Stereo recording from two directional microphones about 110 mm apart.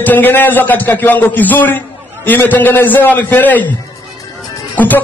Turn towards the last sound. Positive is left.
turn(degrees=15)  # may be behind; listen again after turning